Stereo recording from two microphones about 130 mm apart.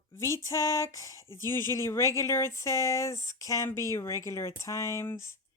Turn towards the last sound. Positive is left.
turn(degrees=20)  # may be behind; listen again after turning